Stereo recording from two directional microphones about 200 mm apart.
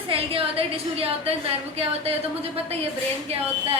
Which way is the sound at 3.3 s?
30° right (ahead or behind).